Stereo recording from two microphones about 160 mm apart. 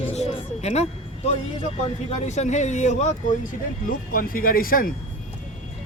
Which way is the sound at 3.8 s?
60° left (ahead or behind).